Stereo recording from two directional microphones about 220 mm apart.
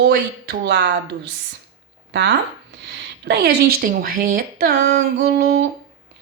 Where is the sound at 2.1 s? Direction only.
55° right (ahead or behind).